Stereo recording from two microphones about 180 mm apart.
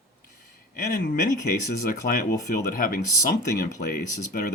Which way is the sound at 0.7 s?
50° left (ahead or behind).